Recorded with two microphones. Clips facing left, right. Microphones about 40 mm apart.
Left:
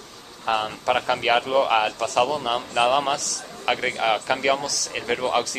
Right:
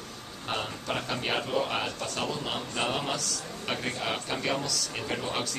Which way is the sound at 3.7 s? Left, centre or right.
Left.